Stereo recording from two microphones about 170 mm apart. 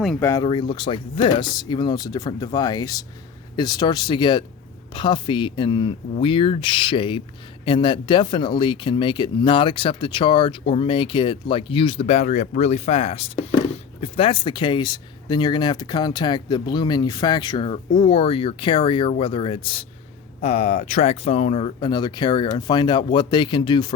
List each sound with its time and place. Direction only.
0.2 s speech: 15° left (ahead or behind)
0.4 s speech: 30° left (ahead or behind)